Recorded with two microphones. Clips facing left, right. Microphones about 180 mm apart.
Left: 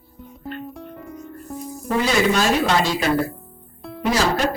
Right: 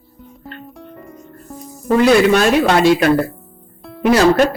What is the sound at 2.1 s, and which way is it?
Speech, 60° right (ahead or behind).